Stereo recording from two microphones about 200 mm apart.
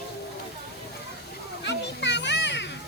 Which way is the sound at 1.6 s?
60° left (ahead or behind).